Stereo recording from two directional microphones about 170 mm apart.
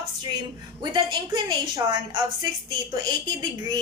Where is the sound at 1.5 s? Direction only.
25° right (ahead or behind).